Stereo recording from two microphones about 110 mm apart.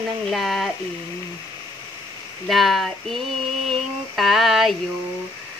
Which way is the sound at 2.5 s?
Centre (ahead or behind).